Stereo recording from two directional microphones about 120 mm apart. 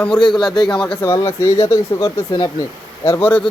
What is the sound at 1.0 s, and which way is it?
Speech, 20° left (ahead or behind).